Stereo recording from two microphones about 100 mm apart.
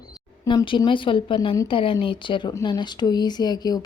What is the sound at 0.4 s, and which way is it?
Speech, 55° left (ahead or behind).